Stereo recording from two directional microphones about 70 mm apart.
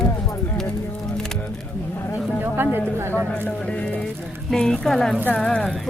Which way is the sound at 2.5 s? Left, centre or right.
Right.